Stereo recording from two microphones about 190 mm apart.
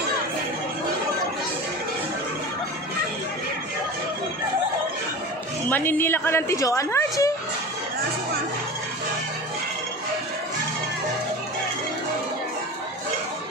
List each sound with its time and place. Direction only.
5.7 s a woman's voice: 10° left (ahead or behind)